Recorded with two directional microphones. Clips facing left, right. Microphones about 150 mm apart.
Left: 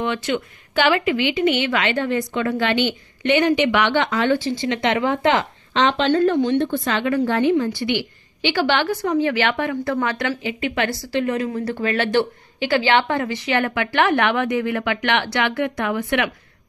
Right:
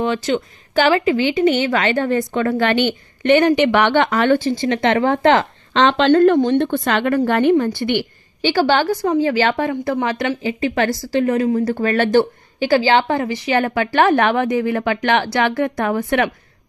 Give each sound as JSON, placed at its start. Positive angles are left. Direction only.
{"t": 0.0, "sound": "a woman's voice", "side_deg": -35}